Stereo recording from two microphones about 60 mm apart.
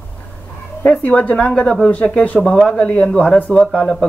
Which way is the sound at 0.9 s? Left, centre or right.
Left.